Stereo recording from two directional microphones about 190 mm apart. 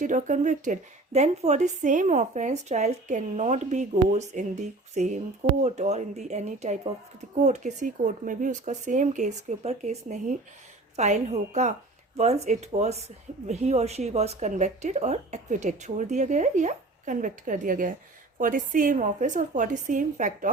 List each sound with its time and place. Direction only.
0.0 s a woman's voice: 40° right (ahead or behind)